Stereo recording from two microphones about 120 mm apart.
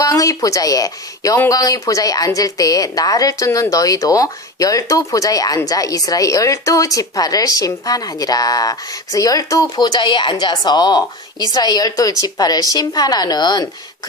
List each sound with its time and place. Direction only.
0.0 s a woman's voice: 30° left (ahead or behind)